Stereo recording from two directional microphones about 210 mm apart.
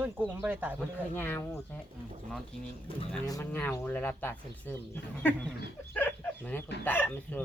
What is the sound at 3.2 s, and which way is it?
Speech, 15° left (ahead or behind).